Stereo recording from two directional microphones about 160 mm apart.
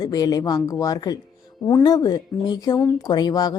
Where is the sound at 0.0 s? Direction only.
25° left (ahead or behind).